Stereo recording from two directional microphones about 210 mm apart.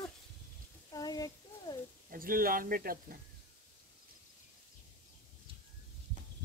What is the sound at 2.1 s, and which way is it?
Speech, 45° right (ahead or behind).